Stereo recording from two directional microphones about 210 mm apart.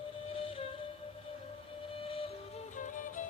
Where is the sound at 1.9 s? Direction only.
25° left (ahead or behind).